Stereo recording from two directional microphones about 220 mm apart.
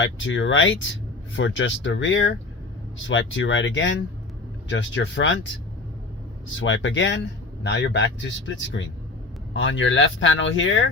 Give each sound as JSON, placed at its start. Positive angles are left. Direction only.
{"t": 0.0, "sound": "speech", "side_deg": 60}
{"t": 6.6, "sound": "speech", "side_deg": 60}